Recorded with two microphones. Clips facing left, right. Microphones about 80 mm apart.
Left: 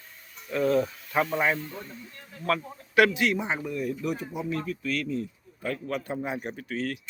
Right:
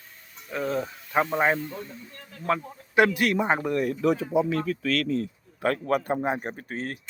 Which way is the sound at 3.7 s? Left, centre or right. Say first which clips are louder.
Right 6 dB; right.